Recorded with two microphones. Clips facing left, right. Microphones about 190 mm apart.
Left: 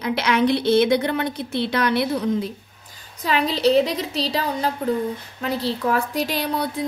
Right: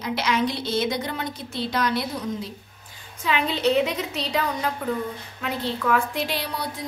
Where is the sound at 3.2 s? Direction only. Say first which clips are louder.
Left 3 dB; 35° left (ahead or behind).